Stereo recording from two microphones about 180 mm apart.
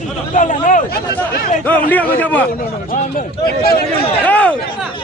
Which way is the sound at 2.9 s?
55° left (ahead or behind).